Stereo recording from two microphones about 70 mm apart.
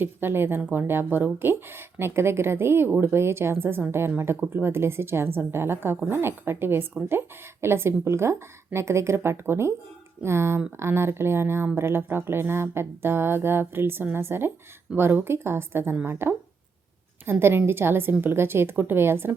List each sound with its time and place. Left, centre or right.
0.0 s speech: right